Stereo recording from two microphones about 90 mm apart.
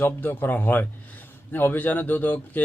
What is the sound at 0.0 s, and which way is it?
Speech, 20° left (ahead or behind).